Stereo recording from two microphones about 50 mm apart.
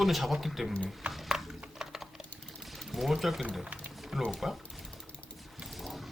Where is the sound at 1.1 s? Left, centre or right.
Centre.